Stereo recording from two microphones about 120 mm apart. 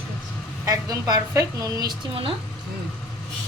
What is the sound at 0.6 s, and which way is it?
A woman's voice, 30° right (ahead or behind).